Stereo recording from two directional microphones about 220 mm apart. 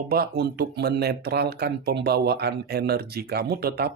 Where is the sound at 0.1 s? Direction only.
45° right (ahead or behind).